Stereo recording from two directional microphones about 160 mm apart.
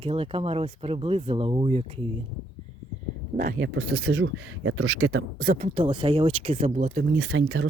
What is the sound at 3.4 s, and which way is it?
Speech, 75° right (ahead or behind).